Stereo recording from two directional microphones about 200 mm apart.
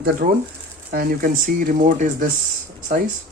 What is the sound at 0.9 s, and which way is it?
Speech, 45° right (ahead or behind).